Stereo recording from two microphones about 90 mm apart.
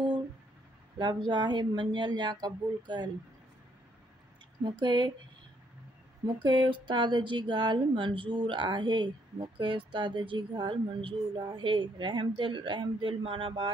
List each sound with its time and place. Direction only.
1.3 s speech: 55° right (ahead or behind)
4.6 s speech: 60° right (ahead or behind)
6.2 s speech: 60° right (ahead or behind); by 13.7 s 75° right (ahead or behind)